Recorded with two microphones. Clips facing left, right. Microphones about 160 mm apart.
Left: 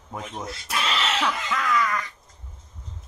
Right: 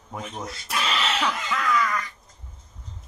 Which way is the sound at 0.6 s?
Centre (ahead or behind).